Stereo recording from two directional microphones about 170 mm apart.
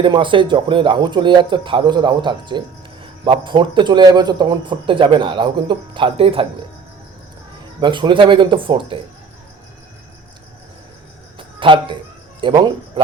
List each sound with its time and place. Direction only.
0.0 s speech: 30° right (ahead or behind)
7.8 s speech: 30° right (ahead or behind)
11.3 s cricket: 30° right (ahead or behind)
12.4 s speech: 25° right (ahead or behind)